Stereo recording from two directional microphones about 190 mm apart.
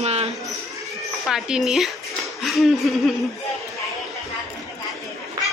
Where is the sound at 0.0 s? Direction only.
35° right (ahead or behind).